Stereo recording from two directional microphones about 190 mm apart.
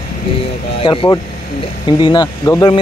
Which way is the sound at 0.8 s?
25° left (ahead or behind).